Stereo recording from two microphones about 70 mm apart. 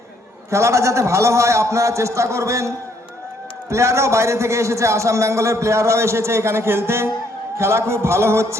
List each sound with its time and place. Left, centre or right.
0.5 s a man's voice: right